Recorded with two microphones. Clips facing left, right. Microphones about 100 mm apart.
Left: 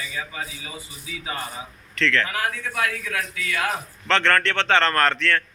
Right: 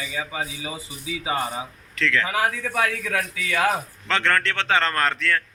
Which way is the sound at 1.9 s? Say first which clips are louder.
Left 1 dB; 10° right (ahead or behind).